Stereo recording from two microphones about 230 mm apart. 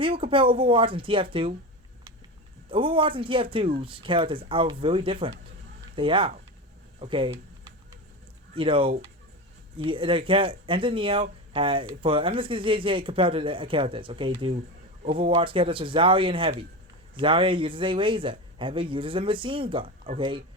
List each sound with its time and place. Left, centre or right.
0.0 s speech: right
2.6 s speech: right
8.5 s speech: right